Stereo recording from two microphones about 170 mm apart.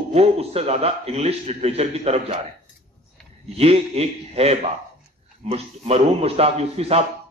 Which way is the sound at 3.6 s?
35° right (ahead or behind).